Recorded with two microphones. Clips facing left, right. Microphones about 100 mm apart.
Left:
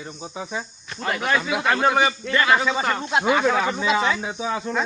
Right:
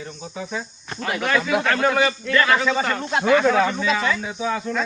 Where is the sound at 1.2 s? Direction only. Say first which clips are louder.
Right 2 dB; 15° left (ahead or behind).